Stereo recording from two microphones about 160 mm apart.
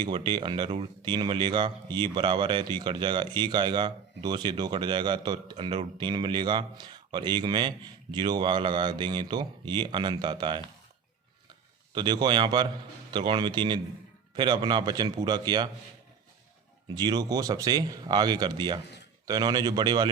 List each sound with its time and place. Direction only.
0.0 s speech: 30° right (ahead or behind)
11.9 s speech: 30° right (ahead or behind)
16.9 s speech: 25° right (ahead or behind)